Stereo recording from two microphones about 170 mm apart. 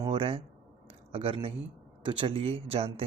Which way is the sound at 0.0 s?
30° right (ahead or behind).